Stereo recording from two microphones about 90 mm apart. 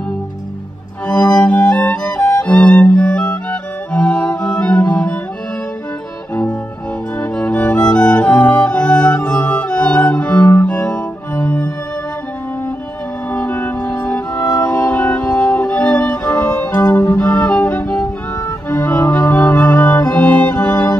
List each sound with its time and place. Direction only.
1.0 s violin: 15° left (ahead or behind)
1.4 s music: 20° left (ahead or behind)
7.2 s music: 15° left (ahead or behind)
13.3 s music: 20° left (ahead or behind)
17.2 s music: 10° left (ahead or behind)